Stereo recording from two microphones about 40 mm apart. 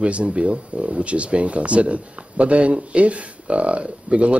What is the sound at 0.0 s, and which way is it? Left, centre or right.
Speech, right.